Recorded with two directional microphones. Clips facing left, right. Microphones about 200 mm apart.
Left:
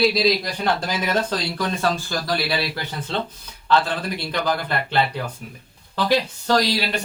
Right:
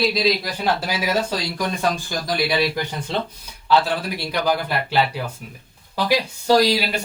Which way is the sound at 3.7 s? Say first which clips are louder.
Right 1 dB; 10° right (ahead or behind).